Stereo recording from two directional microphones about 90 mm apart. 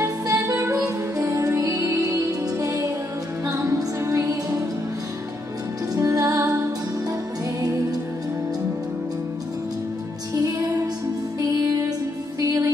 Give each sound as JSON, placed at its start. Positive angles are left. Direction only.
{"t": 0.3, "sound": "music", "side_deg": -35}
{"t": 5.9, "sound": "music", "side_deg": -35}
{"t": 12.4, "sound": "music", "side_deg": -40}